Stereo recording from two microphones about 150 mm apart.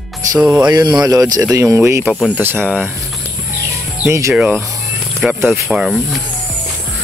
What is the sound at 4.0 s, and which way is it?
Speech, 20° right (ahead or behind).